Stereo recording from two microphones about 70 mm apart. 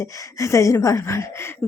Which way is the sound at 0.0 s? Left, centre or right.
Left.